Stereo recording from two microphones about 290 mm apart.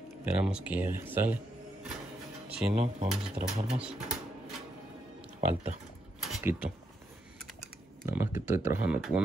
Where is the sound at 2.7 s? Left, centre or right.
Right.